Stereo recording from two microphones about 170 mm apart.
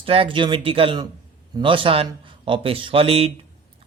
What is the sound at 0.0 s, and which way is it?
Speech, 35° right (ahead or behind).